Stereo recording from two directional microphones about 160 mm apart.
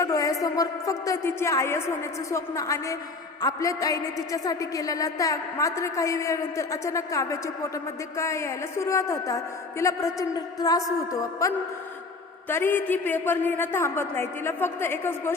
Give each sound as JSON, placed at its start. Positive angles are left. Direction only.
{"t": 0.0, "sound": "a woman's voice", "side_deg": 20}